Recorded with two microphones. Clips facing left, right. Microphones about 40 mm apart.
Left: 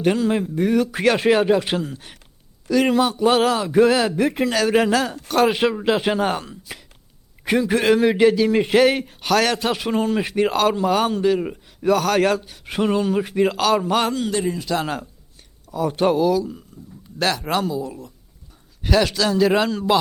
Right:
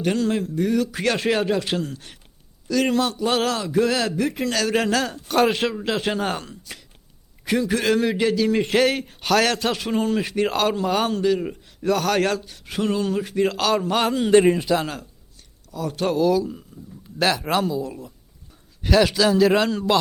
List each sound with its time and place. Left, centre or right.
0.0 s a man's voice: centre
3.7 s speech: left
4.4 s a man's voice: centre
5.5 s a man's voice: centre
7.7 s a man's voice: left; by 14.1 s centre
14.3 s a man's voice: right
14.7 s a man's voice: centre
15.7 s a man's voice: centre
16.1 s a man's voice: centre